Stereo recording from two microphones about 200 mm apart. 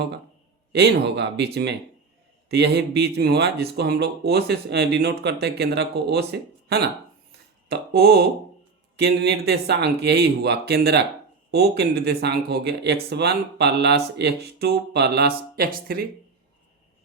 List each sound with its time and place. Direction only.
0.7 s speech: 55° right (ahead or behind)
2.5 s speech: 55° right (ahead or behind)
7.3 s a sound: 55° right (ahead or behind)
9.0 s speech: 55° right (ahead or behind)